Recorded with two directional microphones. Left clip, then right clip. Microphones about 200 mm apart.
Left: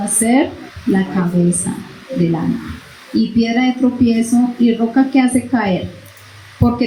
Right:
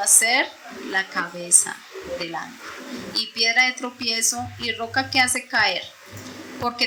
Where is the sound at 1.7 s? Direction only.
60° right (ahead or behind).